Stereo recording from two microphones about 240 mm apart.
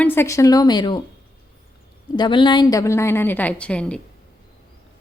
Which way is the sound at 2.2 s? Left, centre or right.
Centre.